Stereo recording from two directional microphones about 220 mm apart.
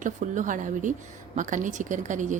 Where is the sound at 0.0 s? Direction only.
35° right (ahead or behind).